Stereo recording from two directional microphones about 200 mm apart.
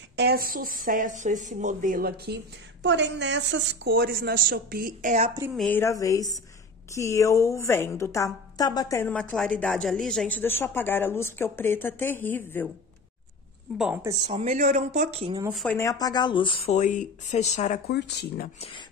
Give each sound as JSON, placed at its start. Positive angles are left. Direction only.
{"t": 0.1, "sound": "speech", "side_deg": -55}
{"t": 5.6, "sound": "a woman's voice", "side_deg": 10}
{"t": 13.7, "sound": "speech", "side_deg": -5}
{"t": 14.0, "sound": "speech", "side_deg": -25}
{"t": 15.5, "sound": "speech", "side_deg": 0}
{"t": 15.8, "sound": "speech", "side_deg": 20}
{"t": 17.8, "sound": "speech", "side_deg": 55}
{"t": 18.6, "sound": "speech", "side_deg": 25}